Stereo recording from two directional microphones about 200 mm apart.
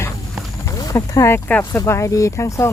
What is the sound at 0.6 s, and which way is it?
Speech, 15° left (ahead or behind).